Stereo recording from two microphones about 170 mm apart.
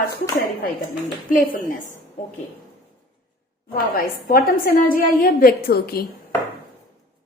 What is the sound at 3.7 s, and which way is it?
A woman's voice, 60° left (ahead or behind).